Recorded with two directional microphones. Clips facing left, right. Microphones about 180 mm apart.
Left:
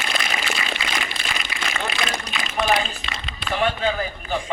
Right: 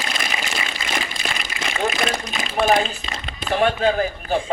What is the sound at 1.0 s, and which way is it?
Water, 45° right (ahead or behind).